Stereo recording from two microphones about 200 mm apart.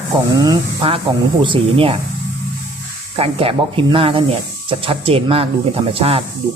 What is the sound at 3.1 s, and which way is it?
Speech, 30° right (ahead or behind).